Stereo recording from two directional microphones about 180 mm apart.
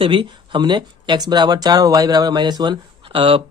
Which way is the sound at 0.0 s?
30° right (ahead or behind).